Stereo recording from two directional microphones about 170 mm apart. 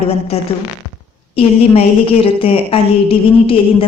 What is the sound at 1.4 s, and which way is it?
A woman's voice, 35° left (ahead or behind).